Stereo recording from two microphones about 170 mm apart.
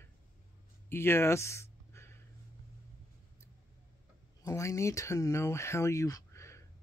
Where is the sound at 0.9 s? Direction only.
15° left (ahead or behind).